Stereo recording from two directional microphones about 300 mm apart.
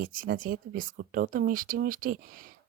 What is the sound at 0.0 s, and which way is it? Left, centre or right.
Speech, right.